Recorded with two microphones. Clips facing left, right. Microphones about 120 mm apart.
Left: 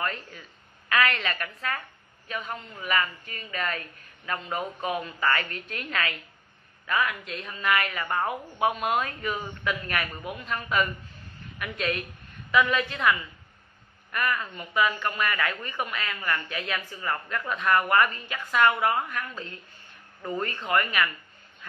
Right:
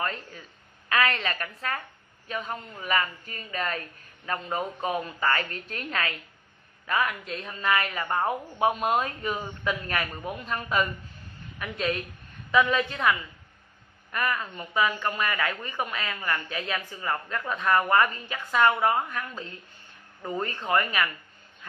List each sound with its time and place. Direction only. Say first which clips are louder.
0.0 s a woman's voice: even; 35° right (ahead or behind)
14.1 s a woman's voice: even; 30° right (ahead or behind)
20.6 s a woman's voice: even; 25° right (ahead or behind)